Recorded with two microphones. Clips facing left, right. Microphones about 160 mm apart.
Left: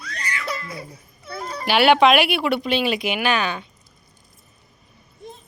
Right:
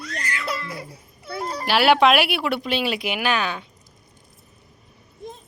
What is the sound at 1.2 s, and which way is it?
Music, 30° right (ahead or behind).